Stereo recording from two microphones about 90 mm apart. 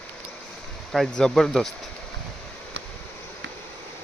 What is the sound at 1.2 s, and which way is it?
Speech, 5° left (ahead or behind).